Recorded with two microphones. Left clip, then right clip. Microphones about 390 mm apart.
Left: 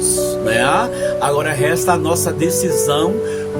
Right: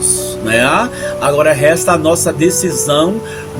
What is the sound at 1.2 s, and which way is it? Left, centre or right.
Speech, left.